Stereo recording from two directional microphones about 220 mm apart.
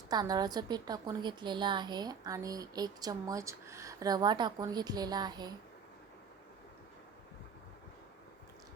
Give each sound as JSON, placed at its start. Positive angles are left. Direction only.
{"t": 0.1, "sound": "a woman's voice", "side_deg": -20}